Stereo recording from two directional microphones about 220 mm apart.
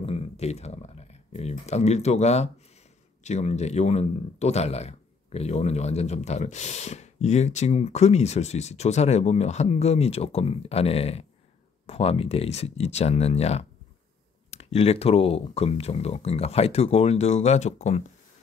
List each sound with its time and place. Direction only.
0.0 s speech: 30° left (ahead or behind)